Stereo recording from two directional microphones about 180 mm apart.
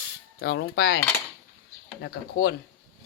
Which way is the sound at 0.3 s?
65° left (ahead or behind).